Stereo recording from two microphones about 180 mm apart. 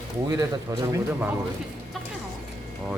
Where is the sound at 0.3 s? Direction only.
20° right (ahead or behind).